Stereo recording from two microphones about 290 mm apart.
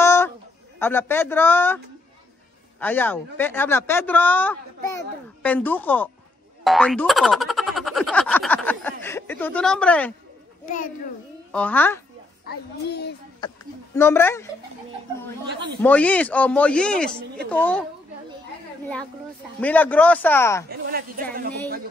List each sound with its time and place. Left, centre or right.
0.0 s a sound: centre
0.7 s speech: centre
2.8 s speech: centre
6.6 s boing: centre
9.0 s speech: centre
10.6 s a child's voice: left
11.5 s speech: centre
12.4 s a child's voice: left
13.9 s speech: centre
15.8 s speech: centre
19.6 s speech: centre
20.6 s a woman's voice: right